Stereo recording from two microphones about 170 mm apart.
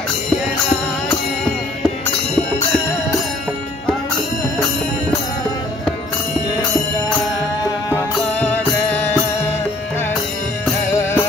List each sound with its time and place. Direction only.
7.9 s music: 10° left (ahead or behind)
10.9 s music: 15° left (ahead or behind)